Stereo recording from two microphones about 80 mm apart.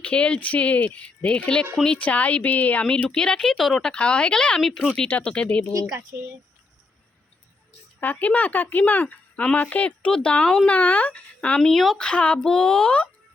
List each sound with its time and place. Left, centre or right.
0.0 s speech: centre
5.0 s speech: centre
6.1 s speech: right
8.0 s speech: left
11.7 s speech: centre
12.0 s speech: centre